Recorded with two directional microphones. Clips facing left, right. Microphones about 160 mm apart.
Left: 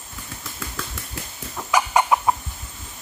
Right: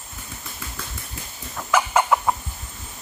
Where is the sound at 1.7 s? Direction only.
15° left (ahead or behind).